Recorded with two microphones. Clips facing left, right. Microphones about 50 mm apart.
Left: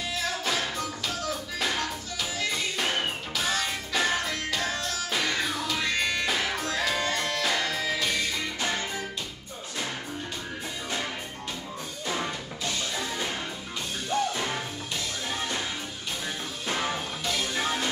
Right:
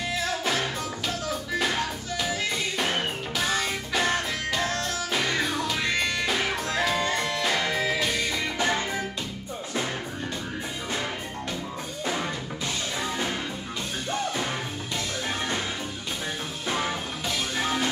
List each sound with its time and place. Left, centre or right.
0.5 s music: centre
7.7 s music: right